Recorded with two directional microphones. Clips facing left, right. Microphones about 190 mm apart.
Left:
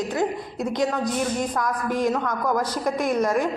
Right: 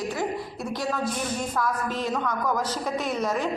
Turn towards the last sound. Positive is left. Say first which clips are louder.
# left 5 dB
turn(degrees=10)  # may be behind; listen again after turning